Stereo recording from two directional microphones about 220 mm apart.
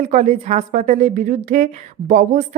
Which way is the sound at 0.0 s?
30° right (ahead or behind).